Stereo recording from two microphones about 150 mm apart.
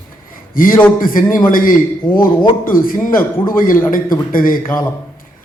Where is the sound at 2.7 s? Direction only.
70° left (ahead or behind).